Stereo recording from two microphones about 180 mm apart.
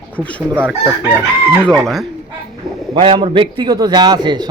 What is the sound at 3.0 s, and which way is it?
A man's voice, 30° right (ahead or behind).